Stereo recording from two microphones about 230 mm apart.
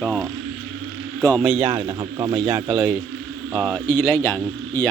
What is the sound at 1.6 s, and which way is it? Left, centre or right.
Speech, centre.